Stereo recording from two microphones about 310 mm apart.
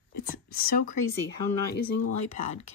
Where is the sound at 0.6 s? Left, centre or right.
Left.